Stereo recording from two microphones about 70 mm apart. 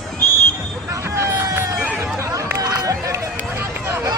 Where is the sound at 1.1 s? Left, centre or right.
Right.